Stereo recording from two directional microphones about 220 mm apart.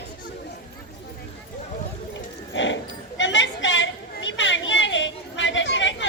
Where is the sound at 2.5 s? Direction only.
55° left (ahead or behind).